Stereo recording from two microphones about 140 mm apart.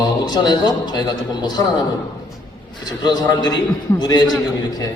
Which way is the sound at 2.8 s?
30° left (ahead or behind).